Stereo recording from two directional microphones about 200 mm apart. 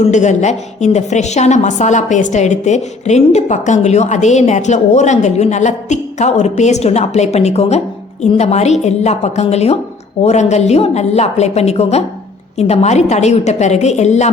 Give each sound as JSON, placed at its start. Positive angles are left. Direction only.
{"t": 0.0, "sound": "a woman's voice", "side_deg": 35}